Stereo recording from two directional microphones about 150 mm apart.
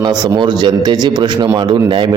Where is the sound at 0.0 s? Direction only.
25° right (ahead or behind).